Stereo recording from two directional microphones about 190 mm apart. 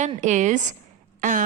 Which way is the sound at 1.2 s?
40° right (ahead or behind).